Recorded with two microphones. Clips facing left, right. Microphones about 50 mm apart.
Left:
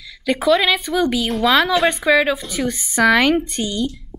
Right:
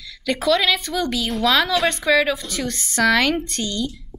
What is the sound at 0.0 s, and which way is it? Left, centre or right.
A woman's voice, centre.